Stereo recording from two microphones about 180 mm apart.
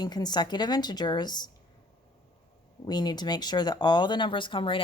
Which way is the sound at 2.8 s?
25° left (ahead or behind).